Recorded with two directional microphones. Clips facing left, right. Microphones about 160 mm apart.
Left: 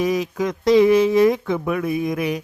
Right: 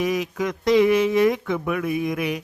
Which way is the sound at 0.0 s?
35° left (ahead or behind).